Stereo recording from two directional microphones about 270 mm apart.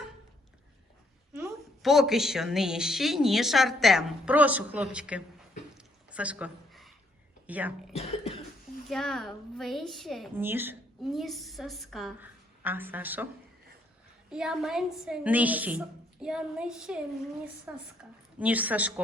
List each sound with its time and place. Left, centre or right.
1.3 s a woman's voice: centre
5.7 s squish: centre
7.4 s a woman's voice: centre
7.9 s cough: left
8.9 s a woman's voice: centre
14.3 s a woman's voice: centre